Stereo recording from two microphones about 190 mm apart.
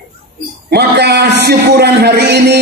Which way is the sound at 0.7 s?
55° right (ahead or behind).